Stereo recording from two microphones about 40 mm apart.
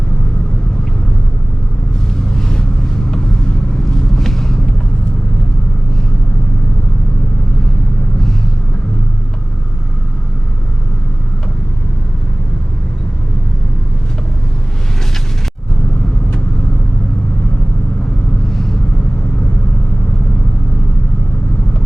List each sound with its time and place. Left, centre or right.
2.3 s vehicle: centre
4.2 s vehicle: centre